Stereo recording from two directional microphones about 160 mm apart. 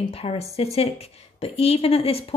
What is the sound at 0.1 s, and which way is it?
A woman's voice, 40° left (ahead or behind).